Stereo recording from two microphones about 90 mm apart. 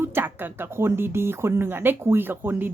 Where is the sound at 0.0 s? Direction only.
25° right (ahead or behind).